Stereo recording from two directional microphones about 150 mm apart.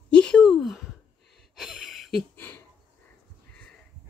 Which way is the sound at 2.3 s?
10° left (ahead or behind).